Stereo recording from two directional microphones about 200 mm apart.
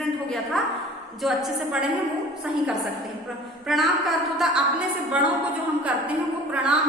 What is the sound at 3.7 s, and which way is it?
A woman's voice, centre (ahead or behind).